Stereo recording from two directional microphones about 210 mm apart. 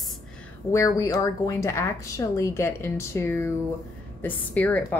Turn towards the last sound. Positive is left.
turn(degrees=10)  # may be behind; listen again after turning